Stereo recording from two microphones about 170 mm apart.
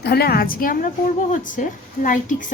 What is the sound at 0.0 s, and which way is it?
A woman's voice, 70° left (ahead or behind).